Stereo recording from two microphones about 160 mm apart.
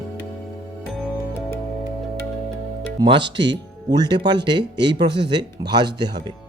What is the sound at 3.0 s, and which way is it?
Speech, 30° right (ahead or behind).